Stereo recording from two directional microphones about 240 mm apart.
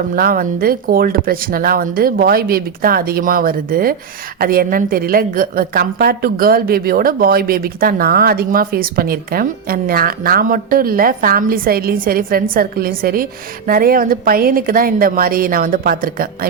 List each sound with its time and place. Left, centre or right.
0.2 s a woman's voice: right